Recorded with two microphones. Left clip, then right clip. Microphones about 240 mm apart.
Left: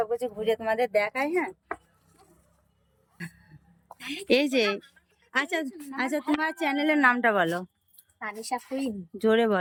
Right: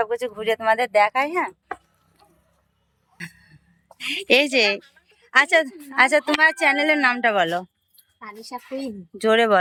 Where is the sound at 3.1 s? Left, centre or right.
Centre.